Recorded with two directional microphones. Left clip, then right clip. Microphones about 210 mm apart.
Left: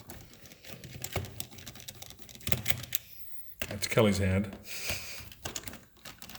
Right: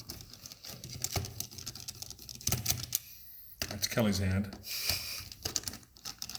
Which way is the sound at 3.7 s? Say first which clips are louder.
Left 6 dB; 50° left (ahead or behind).